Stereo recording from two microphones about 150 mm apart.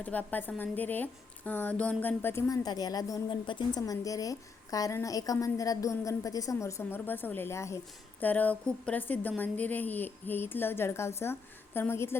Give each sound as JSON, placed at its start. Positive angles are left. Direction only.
{"t": 0.0, "sound": "a woman's voice", "side_deg": 10}